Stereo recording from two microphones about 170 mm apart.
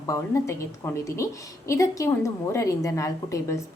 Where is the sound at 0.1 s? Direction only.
20° left (ahead or behind).